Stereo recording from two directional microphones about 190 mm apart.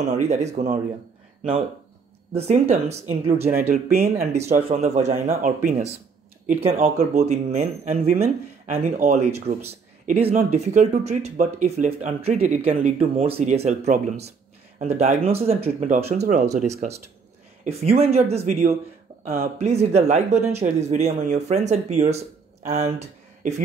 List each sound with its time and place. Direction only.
0.1 s speech: 35° right (ahead or behind)
2.3 s speech: 35° right (ahead or behind)
19.2 s speech: 50° right (ahead or behind)
19.6 s speech: 35° right (ahead or behind)